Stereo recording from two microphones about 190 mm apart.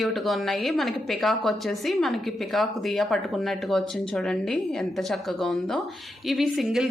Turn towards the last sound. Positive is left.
turn(degrees=0)  # may be behind; listen again after turning